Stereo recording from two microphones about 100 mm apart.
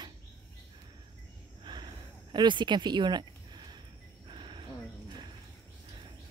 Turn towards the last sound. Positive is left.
turn(degrees=-55)  # may be behind; listen again after turning